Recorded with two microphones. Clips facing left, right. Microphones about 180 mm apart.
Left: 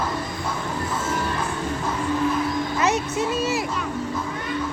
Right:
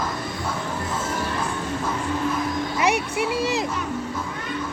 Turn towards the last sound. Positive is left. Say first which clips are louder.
# even
turn(degrees=-15)  # may be behind; listen again after turning